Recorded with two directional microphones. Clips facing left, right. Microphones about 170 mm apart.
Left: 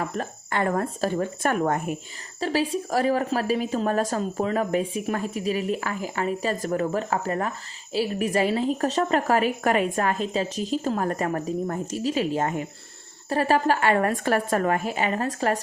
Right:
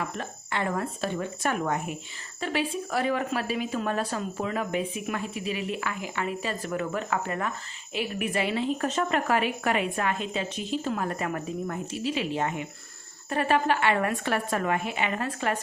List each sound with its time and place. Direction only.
0.0 s a woman's voice: 45° left (ahead or behind)